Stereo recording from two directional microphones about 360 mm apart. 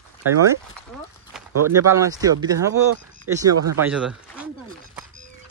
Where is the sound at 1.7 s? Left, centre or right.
Centre.